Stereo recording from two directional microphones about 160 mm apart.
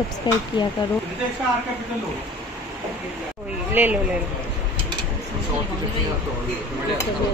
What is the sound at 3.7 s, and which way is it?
Speech, 10° right (ahead or behind).